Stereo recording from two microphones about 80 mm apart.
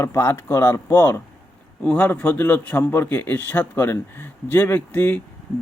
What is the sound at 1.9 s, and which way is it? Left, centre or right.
A man's voice, centre.